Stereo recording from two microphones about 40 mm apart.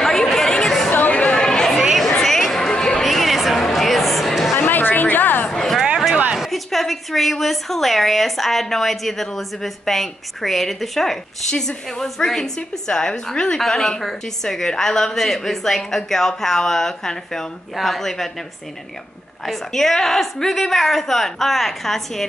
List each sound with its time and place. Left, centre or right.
0.0 s chatter: centre
1.1 s chatter: left
1.4 s chatter: centre
2.1 s a sound: centre
2.7 s a sound: left
3.0 s music: centre
4.6 s chatter: left
6.3 s a woman's voice: centre
19.4 s a woman's voice: centre